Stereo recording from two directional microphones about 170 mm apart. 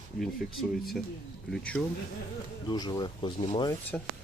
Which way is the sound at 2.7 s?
25° left (ahead or behind).